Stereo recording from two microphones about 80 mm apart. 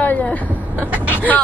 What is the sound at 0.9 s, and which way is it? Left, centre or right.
Speech, centre.